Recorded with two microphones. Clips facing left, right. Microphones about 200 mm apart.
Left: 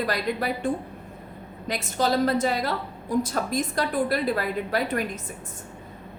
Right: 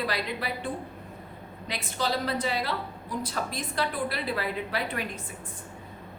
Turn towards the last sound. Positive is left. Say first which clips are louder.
# left 6 dB
turn(degrees=45)  # may be behind; listen again after turning